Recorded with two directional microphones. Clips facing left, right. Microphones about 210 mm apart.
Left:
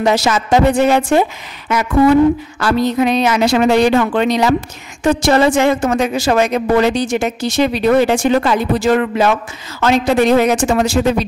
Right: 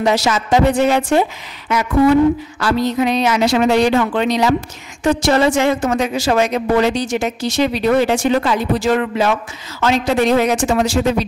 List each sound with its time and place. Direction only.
0.0 s a woman's voice: 50° left (ahead or behind)
2.6 s a woman's voice: 55° left (ahead or behind)